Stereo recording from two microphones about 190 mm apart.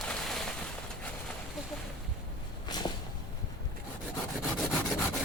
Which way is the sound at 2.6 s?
20° left (ahead or behind).